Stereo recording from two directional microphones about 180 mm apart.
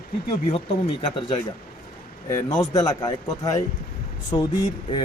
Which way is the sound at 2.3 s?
20° left (ahead or behind).